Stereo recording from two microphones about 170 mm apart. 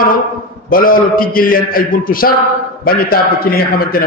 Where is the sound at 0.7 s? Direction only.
55° left (ahead or behind).